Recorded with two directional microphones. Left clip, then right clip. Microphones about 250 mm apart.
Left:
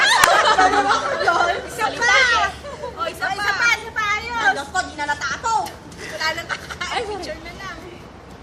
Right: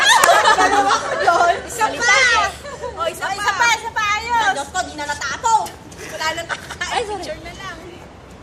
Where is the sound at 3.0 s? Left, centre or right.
Centre.